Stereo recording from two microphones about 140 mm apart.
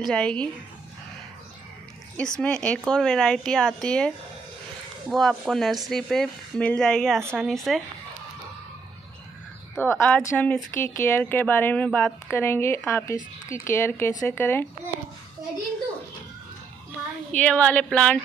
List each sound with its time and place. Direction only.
0.1 s speech: 5° left (ahead or behind)
2.1 s speech: 5° left (ahead or behind)
5.1 s speech: centre (ahead or behind)
9.8 s speech: 15° left (ahead or behind)
17.3 s speech: 10° left (ahead or behind)